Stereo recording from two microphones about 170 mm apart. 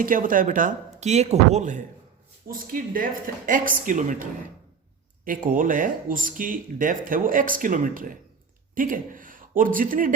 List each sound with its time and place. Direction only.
0.0 s speech: 55° right (ahead or behind)
2.5 s a man's voice: 55° right (ahead or behind)